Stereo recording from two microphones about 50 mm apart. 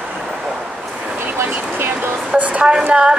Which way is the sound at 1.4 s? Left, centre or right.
Right.